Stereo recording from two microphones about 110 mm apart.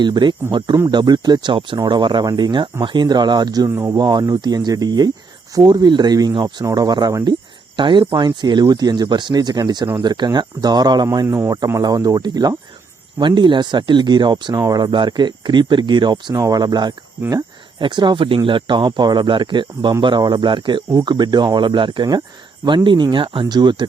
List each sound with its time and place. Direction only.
0.0 s speech: 45° right (ahead or behind)
3.7 s speech: 25° right (ahead or behind)
3.9 s speech: 40° right (ahead or behind)